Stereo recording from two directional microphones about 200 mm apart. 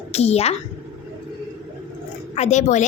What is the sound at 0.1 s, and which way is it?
Speech, 30° left (ahead or behind).